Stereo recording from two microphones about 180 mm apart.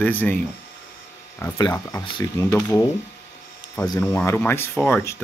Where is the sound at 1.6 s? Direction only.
20° left (ahead or behind).